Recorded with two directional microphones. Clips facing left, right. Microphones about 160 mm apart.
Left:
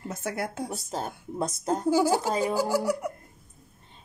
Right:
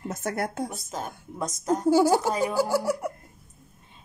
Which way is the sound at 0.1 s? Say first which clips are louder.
Right 2 dB; 50° right (ahead or behind).